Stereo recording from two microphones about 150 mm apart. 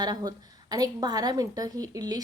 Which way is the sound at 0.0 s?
25° right (ahead or behind).